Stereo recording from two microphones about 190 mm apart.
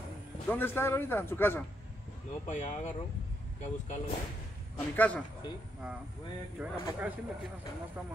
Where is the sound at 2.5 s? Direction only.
40° left (ahead or behind).